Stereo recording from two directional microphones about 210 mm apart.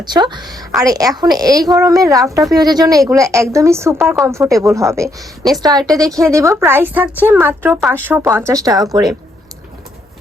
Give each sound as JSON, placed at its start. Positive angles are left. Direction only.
{"t": 0.0, "sound": "a woman's voice", "side_deg": -20}